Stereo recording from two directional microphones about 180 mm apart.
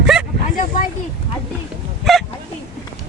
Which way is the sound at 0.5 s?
45° left (ahead or behind).